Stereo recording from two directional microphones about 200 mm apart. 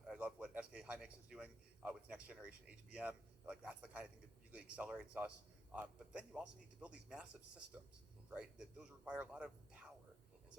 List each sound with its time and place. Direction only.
0.1 s speech: 5° right (ahead or behind)